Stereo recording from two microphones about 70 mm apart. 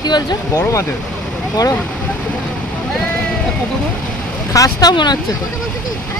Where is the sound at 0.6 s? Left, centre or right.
Left.